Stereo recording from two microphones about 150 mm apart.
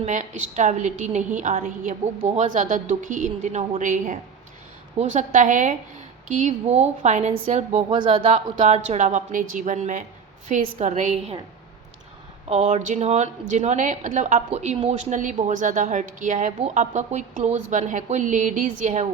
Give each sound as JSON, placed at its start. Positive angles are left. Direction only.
{"t": 0.0, "sound": "a woman's voice", "side_deg": -50}
{"t": 12.5, "sound": "a woman's voice", "side_deg": -45}